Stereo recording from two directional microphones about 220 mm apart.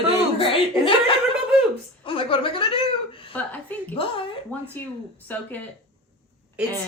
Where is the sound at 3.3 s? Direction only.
5° left (ahead or behind).